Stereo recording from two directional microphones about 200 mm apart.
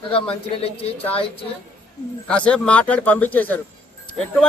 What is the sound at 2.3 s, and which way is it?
Speech, 5° left (ahead or behind).